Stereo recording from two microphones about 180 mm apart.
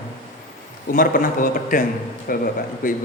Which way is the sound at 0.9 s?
50° left (ahead or behind).